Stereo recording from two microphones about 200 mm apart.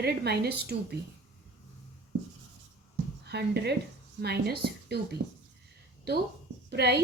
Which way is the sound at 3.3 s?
55° right (ahead or behind).